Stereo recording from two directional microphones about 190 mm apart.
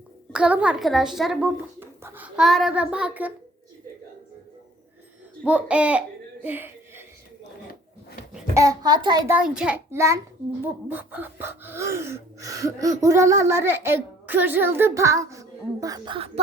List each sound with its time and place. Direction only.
0.3 s a child's voice: 5° right (ahead or behind)
5.5 s speech: 5° right (ahead or behind)
8.5 s a child's voice: 20° right (ahead or behind)
9.3 s speech: 5° right (ahead or behind); by 16.4 s 30° right (ahead or behind)